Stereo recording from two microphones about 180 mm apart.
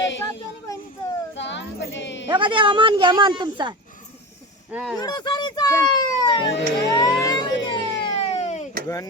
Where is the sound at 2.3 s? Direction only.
25° right (ahead or behind).